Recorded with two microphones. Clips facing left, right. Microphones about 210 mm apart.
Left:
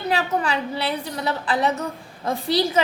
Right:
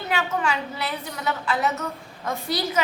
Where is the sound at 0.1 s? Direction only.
35° left (ahead or behind).